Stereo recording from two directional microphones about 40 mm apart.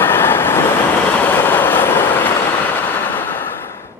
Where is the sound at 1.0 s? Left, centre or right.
Left.